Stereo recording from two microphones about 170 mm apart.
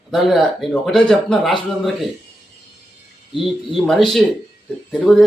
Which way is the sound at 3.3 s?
Centre (ahead or behind).